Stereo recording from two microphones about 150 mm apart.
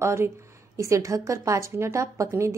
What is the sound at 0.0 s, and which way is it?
A woman's voice, 20° right (ahead or behind).